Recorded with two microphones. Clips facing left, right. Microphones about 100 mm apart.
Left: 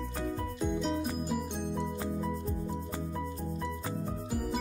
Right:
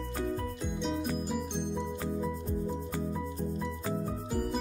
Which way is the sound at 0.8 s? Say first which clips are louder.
Even; centre (ahead or behind).